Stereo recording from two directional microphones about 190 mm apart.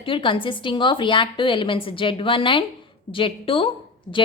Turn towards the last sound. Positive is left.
turn(degrees=25)  # may be behind; listen again after turning